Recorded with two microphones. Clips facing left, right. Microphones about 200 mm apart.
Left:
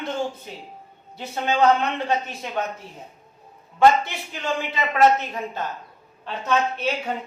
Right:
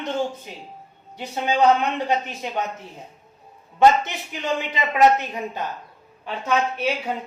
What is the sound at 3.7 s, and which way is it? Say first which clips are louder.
A woman's voice: right 1 dB; 20° right (ahead or behind).